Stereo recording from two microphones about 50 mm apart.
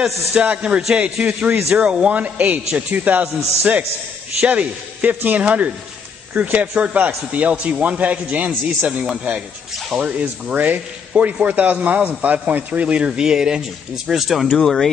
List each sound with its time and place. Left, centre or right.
0.4 s a man's voice: right
12.8 s speech: right
14.0 s speech: centre